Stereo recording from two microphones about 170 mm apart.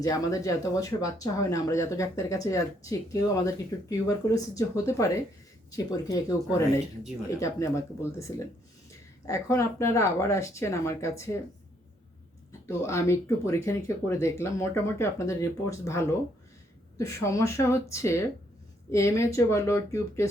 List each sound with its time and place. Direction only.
0.0 s speech: 20° left (ahead or behind)
12.5 s speech: 15° left (ahead or behind)